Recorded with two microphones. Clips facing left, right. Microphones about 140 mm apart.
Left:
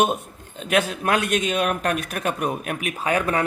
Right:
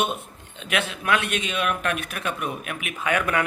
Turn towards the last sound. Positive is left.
turn(degrees=35)  # may be behind; listen again after turning